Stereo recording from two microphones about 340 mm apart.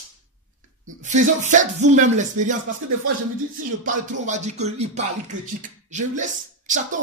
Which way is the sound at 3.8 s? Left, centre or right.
Right.